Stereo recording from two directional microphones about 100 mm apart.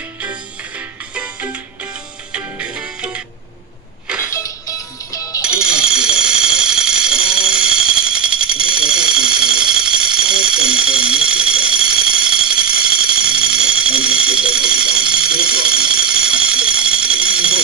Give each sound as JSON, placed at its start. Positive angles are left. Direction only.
{"t": 0.2, "sound": "music", "side_deg": -15}
{"t": 4.3, "sound": "music", "side_deg": 35}
{"t": 5.4, "sound": "alarm", "side_deg": -10}